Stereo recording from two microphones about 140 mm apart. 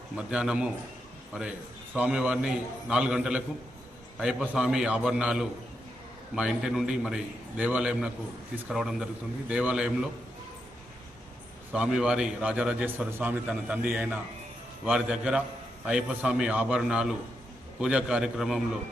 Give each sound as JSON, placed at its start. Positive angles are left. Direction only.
{"t": 0.2, "sound": "a man's voice", "side_deg": -5}
{"t": 11.7, "sound": "a man's voice", "side_deg": -5}